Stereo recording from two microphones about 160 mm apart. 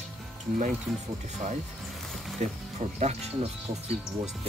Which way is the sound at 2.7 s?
45° right (ahead or behind).